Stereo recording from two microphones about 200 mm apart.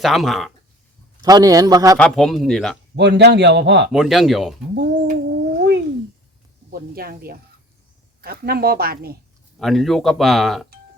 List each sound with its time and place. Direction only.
0.0 s speech: centre (ahead or behind)
1.2 s a man's voice: 20° right (ahead or behind)
2.0 s speech: 5° left (ahead or behind)
2.9 s a man's voice: 60° right (ahead or behind)
3.9 s speech: centre (ahead or behind)
4.7 s speech: 50° right (ahead or behind)
5.5 s cat: 55° right (ahead or behind)
6.7 s speech: 50° right (ahead or behind)
9.6 s speech: centre (ahead or behind)